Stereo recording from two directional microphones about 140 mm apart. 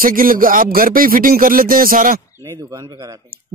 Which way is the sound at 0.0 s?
90° right.